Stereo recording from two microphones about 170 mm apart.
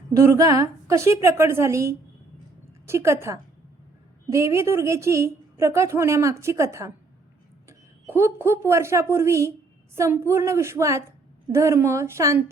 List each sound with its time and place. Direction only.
0.1 s a woman's voice: 20° right (ahead or behind)